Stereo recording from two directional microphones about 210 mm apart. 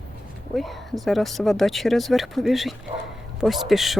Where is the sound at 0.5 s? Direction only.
Centre (ahead or behind).